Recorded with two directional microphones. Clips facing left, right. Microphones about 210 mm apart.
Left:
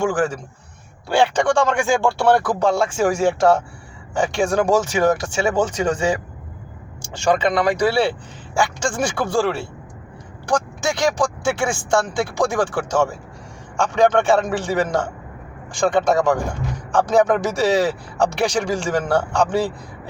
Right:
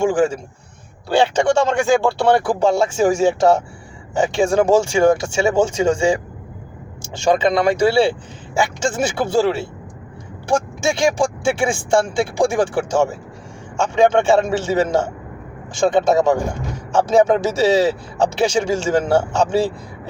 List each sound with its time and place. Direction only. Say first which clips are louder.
0.0 s a man's voice: right 4 dB; 25° right (ahead or behind)
1.5 s a man's voice: right 2 dB; 25° right (ahead or behind)
7.4 s a man's voice: right 3 dB; 25° right (ahead or behind)